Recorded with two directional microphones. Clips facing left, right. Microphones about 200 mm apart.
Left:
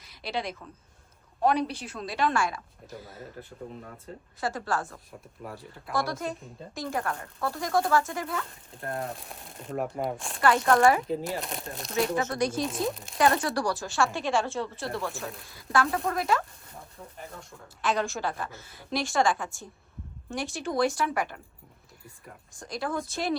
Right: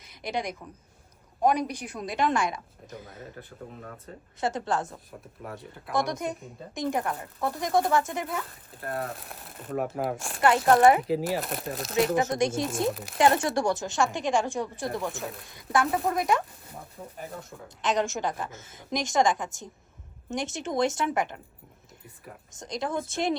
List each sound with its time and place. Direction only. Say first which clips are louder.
0.0 s a woman's voice: right 1 dB; 20° right (ahead or behind)
2.9 s speech: even; centre (ahead or behind)
4.4 s a woman's voice: right 2 dB; 20° right (ahead or behind)
5.4 s speech: right 1 dB; centre (ahead or behind)
6.0 s a woman's voice: right 2 dB; 20° right (ahead or behind)
9.0 s speech: right 1 dB; centre (ahead or behind)
10.7 s a woman's voice: right 3 dB; 20° right (ahead or behind)
11.0 s speech: right 4 dB; 5° right (ahead or behind)
12.0 s a woman's voice: right 2 dB; 20° right (ahead or behind)
12.6 s speech: right 2 dB; centre (ahead or behind)
13.1 s a woman's voice: right 2 dB; 25° right (ahead or behind)
15.1 s speech: right 1 dB; centre (ahead or behind)
15.5 s a woman's voice: right 1 dB; 20° right (ahead or behind)
22.5 s a woman's voice: right 1 dB; 20° right (ahead or behind)